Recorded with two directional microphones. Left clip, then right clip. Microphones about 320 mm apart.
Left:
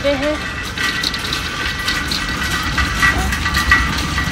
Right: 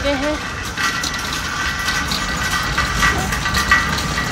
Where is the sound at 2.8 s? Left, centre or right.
Centre.